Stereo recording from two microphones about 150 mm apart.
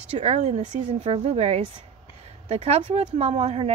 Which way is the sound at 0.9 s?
40° right (ahead or behind).